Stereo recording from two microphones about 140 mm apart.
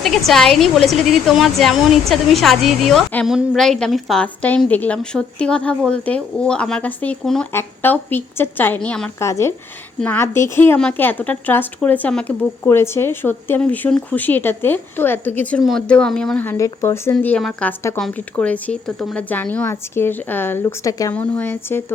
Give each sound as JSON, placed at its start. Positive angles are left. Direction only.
{"t": 0.0, "sound": "a woman's voice", "side_deg": 0}
{"t": 9.1, "sound": "a woman's voice", "side_deg": 20}